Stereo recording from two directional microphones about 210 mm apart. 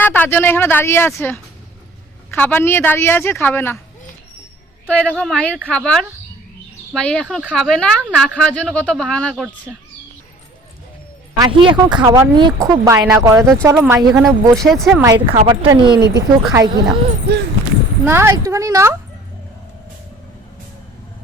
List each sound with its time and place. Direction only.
0.0 s speech: 10° left (ahead or behind)
4.9 s speech: 5° left (ahead or behind)
11.3 s speech: 20° right (ahead or behind)
14.5 s speech: centre (ahead or behind)
15.0 s speech: 20° right (ahead or behind)
18.0 s speech: 10° right (ahead or behind)